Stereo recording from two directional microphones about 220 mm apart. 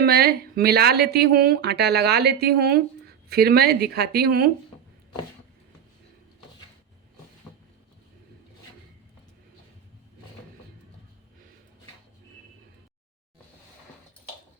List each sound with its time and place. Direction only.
0.0 s speech: 45° right (ahead or behind)